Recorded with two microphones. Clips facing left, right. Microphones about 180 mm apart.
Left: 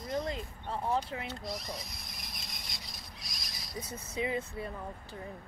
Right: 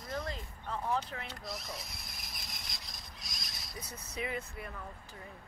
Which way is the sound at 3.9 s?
25° left (ahead or behind).